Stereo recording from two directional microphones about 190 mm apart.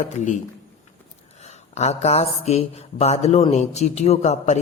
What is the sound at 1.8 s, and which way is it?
A man's voice, 35° left (ahead or behind).